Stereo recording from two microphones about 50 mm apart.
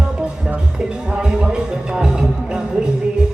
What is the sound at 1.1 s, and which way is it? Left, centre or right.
Music, centre.